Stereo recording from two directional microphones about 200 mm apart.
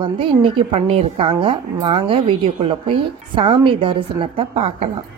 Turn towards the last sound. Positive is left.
turn(degrees=-30)  # may be behind; listen again after turning